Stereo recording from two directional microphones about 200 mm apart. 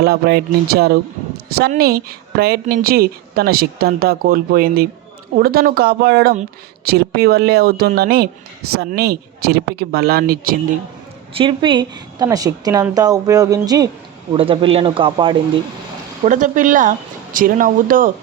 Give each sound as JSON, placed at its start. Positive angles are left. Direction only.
{"t": 0.0, "sound": "a woman's voice", "side_deg": -50}
{"t": 11.3, "sound": "a woman's voice", "side_deg": -25}
{"t": 16.2, "sound": "speech", "side_deg": -40}